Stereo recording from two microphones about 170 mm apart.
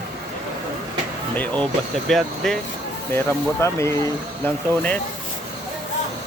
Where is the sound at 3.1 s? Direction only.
15° left (ahead or behind).